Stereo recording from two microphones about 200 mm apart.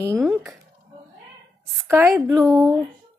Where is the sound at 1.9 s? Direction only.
10° right (ahead or behind).